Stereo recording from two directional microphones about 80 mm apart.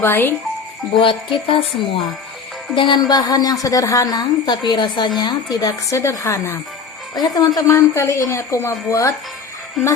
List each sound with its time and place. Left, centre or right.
0.0 s speech: left
1.0 s speech: left
3.0 s a woman's voice: left
7.2 s speech: left
7.7 s a woman's voice: left